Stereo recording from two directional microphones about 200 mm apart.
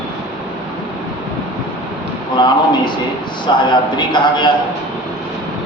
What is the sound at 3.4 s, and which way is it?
A man's voice, 20° left (ahead or behind).